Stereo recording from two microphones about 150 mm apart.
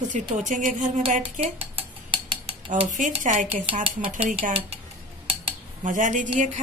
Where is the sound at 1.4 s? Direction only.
35° right (ahead or behind).